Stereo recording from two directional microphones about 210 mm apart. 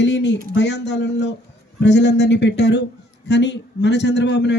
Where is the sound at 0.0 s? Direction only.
55° left (ahead or behind).